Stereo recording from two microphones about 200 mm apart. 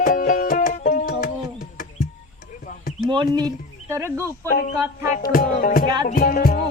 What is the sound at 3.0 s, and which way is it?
Speech, 20° right (ahead or behind).